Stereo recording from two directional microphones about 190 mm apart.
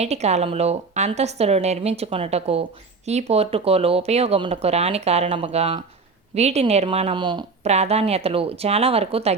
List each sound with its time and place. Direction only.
0.0 s speech: 35° right (ahead or behind)
7.6 s speech: 35° right (ahead or behind)